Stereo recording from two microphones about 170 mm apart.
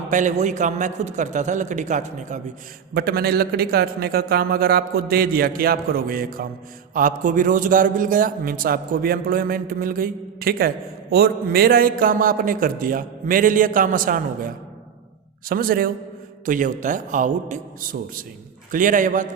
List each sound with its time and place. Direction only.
0.1 s a man's voice: 45° right (ahead or behind)
2.9 s a man's voice: 65° right (ahead or behind); by 19.3 s 50° right (ahead or behind)